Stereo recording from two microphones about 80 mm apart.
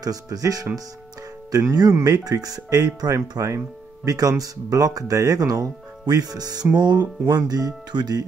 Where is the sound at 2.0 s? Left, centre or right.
Right.